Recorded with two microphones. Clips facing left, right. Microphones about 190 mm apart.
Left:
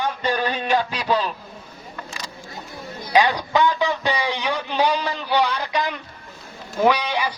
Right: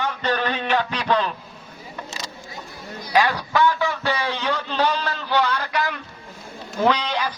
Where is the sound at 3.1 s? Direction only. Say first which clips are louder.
Left 2 dB; 15° left (ahead or behind).